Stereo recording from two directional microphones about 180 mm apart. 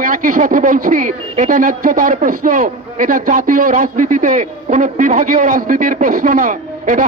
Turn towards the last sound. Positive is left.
turn(degrees=-45)  # may be behind; listen again after turning